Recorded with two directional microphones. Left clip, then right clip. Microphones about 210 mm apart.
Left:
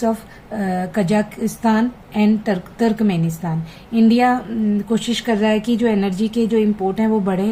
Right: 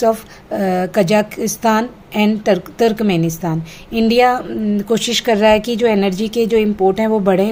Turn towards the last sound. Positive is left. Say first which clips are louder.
# right 5 dB
turn(degrees=-45)  # may be behind; listen again after turning